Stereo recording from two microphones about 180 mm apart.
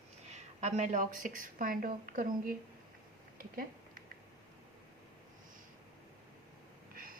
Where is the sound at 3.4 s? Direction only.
50° right (ahead or behind).